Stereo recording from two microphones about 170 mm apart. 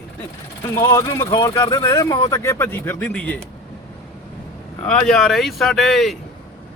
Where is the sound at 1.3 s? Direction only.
30° left (ahead or behind); by 3.4 s 10° left (ahead or behind).